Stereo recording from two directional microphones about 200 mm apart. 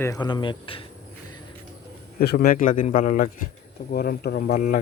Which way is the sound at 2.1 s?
50° left (ahead or behind).